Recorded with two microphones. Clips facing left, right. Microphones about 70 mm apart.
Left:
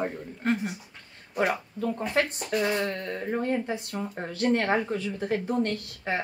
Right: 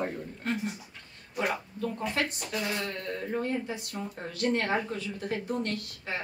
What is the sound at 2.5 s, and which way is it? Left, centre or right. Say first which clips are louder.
Speech: left 9 dB; left.